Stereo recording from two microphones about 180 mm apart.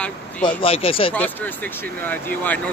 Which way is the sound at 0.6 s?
30° left (ahead or behind).